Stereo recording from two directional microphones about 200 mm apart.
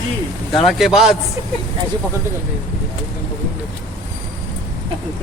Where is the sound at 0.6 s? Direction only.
Centre (ahead or behind).